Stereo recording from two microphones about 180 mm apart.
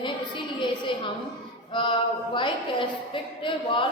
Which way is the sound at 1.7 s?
25° left (ahead or behind).